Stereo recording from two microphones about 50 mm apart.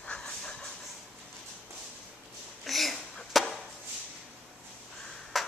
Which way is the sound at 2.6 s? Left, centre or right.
Centre.